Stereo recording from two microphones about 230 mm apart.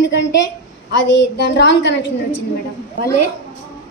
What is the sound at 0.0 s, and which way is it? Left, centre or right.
A woman's voice, left.